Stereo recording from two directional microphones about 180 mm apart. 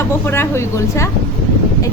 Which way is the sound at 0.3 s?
15° left (ahead or behind).